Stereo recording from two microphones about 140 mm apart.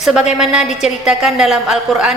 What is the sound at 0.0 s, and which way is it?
A woman's voice, 5° right (ahead or behind).